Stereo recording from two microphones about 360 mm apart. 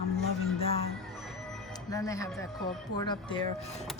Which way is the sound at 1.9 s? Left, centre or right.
Centre.